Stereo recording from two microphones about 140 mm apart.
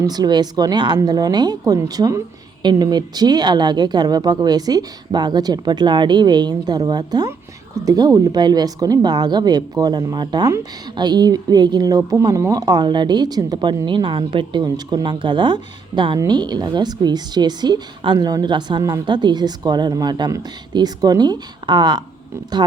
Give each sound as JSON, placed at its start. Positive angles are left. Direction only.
{"t": 0.0, "sound": "a woman's voice", "side_deg": -30}